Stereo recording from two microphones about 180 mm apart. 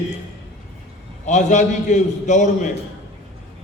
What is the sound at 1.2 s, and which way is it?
A man's voice, 40° left (ahead or behind).